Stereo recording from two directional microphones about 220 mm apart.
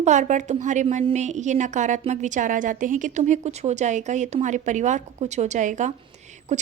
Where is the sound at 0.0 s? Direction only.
35° right (ahead or behind).